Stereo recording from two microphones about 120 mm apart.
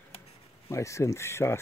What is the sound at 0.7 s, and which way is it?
Speech, 25° left (ahead or behind).